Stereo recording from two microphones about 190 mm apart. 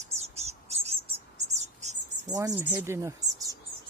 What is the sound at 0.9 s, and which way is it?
Mouse, 30° right (ahead or behind).